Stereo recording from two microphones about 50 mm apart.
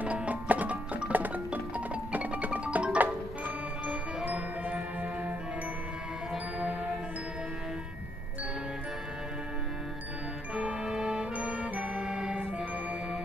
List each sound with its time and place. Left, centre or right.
0.0 s music: right
4.2 s music: right
10.5 s music: right